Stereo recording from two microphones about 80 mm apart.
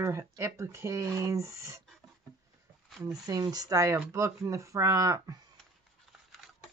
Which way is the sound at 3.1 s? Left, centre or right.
Right.